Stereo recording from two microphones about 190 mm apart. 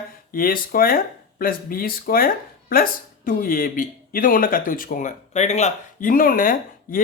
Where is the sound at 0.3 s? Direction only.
50° left (ahead or behind).